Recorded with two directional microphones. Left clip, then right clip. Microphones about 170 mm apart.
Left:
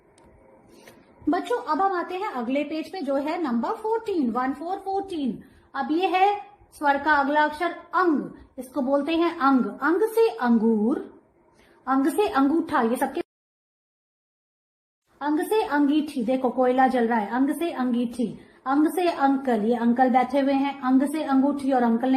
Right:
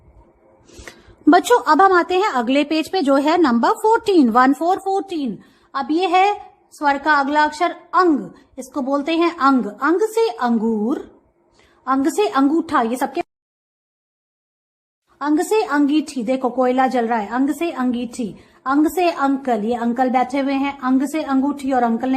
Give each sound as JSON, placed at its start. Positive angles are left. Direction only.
{"t": 1.3, "sound": "a woman's voice", "side_deg": -65}
{"t": 5.7, "sound": "a woman's voice", "side_deg": -30}
{"t": 15.2, "sound": "a woman's voice", "side_deg": -35}